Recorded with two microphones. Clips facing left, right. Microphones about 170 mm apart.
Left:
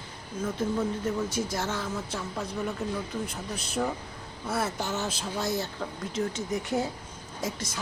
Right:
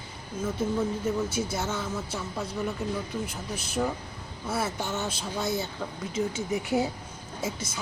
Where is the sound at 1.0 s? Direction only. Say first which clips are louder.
Right 1 dB; 5° right (ahead or behind).